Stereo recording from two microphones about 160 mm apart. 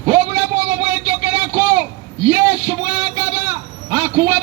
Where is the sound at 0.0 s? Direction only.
20° right (ahead or behind).